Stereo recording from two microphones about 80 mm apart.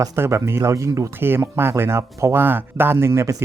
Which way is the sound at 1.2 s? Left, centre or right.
Right.